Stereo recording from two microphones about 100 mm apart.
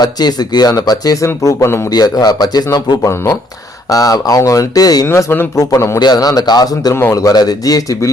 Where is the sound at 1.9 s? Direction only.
40° left (ahead or behind).